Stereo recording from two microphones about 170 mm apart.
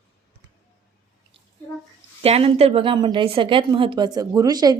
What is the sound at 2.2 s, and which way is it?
A woman's voice, 35° right (ahead or behind).